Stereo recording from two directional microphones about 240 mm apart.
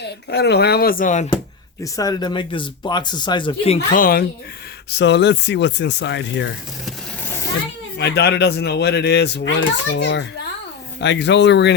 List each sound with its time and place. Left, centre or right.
0.0 s speech: left
1.8 s speech: centre; by 6.5 s left
7.9 s speech: left